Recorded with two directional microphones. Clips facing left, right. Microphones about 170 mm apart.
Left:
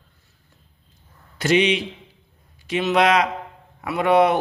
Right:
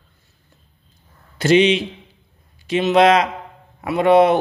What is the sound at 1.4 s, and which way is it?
Speech, 25° right (ahead or behind).